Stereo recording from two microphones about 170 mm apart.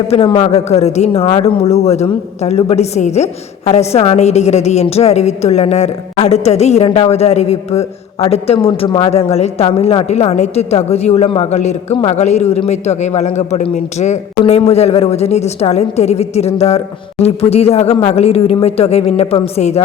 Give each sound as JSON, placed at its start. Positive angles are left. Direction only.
{"t": 0.1, "sound": "a man's voice", "side_deg": 35}